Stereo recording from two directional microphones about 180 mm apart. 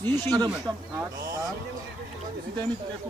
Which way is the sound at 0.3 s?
20° right (ahead or behind).